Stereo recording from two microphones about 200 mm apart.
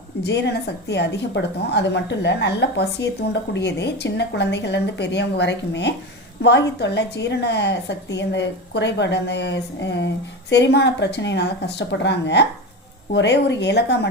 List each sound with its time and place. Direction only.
0.3 s a woman's voice: 55° left (ahead or behind)